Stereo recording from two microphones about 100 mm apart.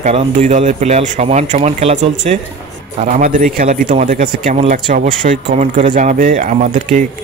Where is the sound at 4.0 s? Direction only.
90° right.